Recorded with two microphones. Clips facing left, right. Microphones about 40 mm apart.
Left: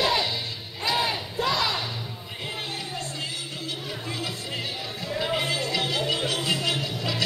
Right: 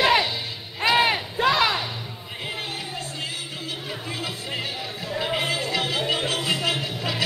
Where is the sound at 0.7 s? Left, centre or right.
Right.